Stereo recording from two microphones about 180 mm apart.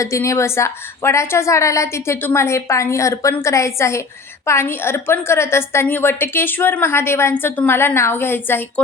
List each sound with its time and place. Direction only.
0.0 s a woman's voice: 15° left (ahead or behind)